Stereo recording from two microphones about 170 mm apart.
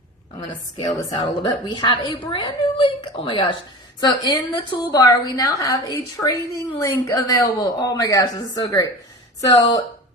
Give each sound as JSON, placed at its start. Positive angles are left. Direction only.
{"t": 0.3, "sound": "a woman's voice", "side_deg": 25}